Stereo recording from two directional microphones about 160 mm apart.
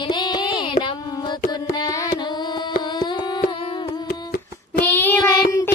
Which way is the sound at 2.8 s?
30° left (ahead or behind).